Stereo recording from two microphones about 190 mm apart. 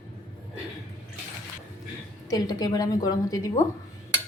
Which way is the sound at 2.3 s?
20° left (ahead or behind).